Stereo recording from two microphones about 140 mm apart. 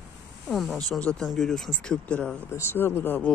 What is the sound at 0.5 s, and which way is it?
Speech, centre (ahead or behind).